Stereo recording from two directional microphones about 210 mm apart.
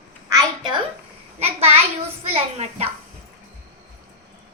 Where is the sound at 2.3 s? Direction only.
30° right (ahead or behind).